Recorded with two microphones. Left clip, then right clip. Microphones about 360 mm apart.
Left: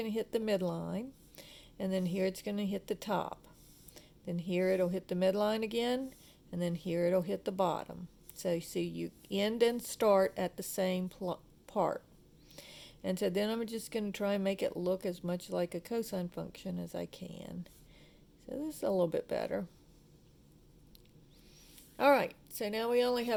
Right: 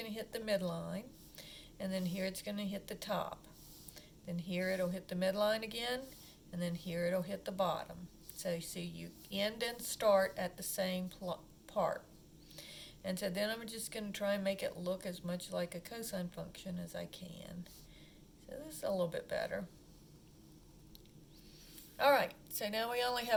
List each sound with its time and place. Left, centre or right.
0.0 s speech: centre
21.9 s speech: centre